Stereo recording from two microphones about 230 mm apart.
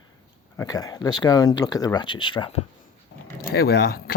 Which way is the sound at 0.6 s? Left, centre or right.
Centre.